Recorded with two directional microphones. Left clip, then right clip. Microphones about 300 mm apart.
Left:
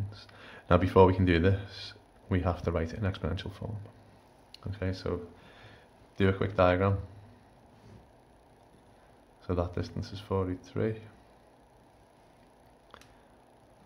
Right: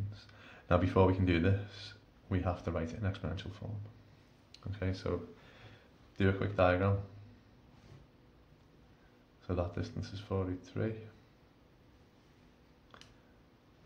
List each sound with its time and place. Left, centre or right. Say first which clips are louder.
0.1 s speech: left 6 dB; centre
4.5 s a sound: left 4 dB; centre
6.1 s speech: left 5 dB; centre
9.5 s speech: left 5 dB; centre